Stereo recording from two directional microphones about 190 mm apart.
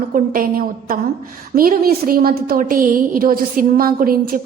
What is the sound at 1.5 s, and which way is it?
A woman's voice, 50° right (ahead or behind).